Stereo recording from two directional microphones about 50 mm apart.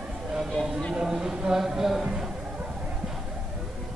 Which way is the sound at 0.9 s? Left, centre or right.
Centre.